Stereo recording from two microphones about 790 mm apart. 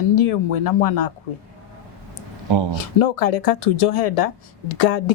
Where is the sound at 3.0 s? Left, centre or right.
Left.